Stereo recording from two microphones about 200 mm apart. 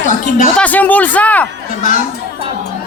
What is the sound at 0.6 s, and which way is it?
Speech, 10° left (ahead or behind).